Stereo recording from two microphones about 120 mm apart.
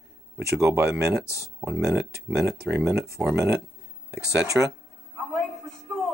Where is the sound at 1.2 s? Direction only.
25° left (ahead or behind).